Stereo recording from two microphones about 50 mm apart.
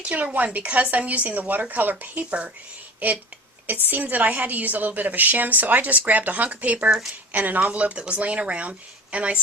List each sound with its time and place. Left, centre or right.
0.0 s a woman's voice: right
3.7 s a woman's voice: right